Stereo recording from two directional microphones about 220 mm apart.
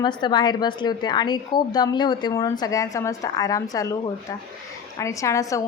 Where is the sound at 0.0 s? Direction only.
20° left (ahead or behind).